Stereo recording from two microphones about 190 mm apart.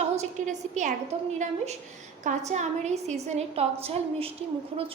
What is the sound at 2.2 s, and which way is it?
A woman's voice, 40° right (ahead or behind).